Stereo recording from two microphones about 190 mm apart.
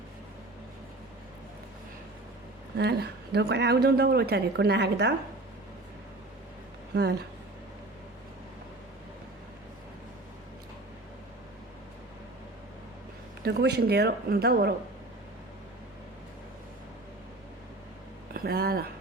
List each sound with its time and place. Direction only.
2.7 s a woman's voice: 60° right (ahead or behind)
6.9 s a woman's voice: 60° right (ahead or behind)
13.4 s a woman's voice: 60° right (ahead or behind)
18.3 s speech: 55° right (ahead or behind)